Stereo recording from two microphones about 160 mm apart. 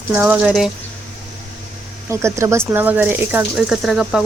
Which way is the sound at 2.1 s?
20° right (ahead or behind).